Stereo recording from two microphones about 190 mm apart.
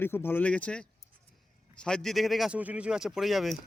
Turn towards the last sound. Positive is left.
turn(degrees=0)  # may be behind; listen again after turning